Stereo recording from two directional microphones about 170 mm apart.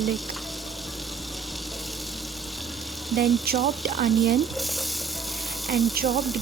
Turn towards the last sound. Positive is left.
turn(degrees=0)  # may be behind; listen again after turning